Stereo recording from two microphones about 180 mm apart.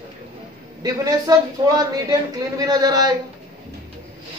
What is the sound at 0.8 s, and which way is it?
Speech, 20° right (ahead or behind).